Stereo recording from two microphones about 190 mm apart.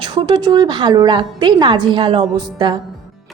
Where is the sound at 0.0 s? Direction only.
25° right (ahead or behind).